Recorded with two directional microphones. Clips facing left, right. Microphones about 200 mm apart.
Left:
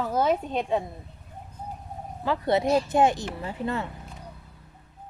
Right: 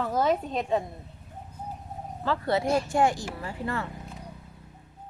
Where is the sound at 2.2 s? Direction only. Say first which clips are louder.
Left 2 dB; 20° left (ahead or behind).